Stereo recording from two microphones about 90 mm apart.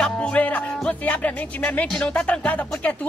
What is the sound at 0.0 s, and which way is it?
Music, 10° left (ahead or behind).